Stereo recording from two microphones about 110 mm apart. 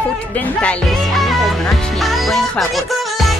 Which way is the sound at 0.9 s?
Centre (ahead or behind).